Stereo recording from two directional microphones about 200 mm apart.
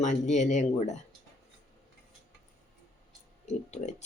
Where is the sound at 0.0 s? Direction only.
35° left (ahead or behind).